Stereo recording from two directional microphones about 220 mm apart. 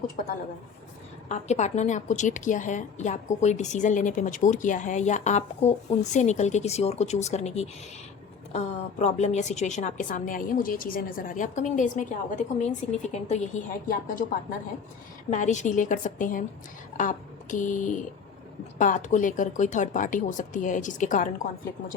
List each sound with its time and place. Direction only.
1.3 s a woman's voice: 30° left (ahead or behind)
15.3 s a woman's voice: 35° left (ahead or behind)